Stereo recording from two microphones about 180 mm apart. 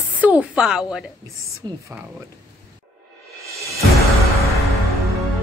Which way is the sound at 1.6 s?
25° right (ahead or behind).